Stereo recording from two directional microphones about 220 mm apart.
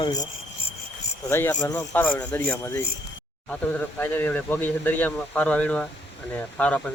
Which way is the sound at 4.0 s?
10° left (ahead or behind).